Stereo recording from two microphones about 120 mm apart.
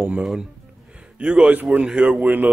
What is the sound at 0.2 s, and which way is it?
Speech, centre (ahead or behind).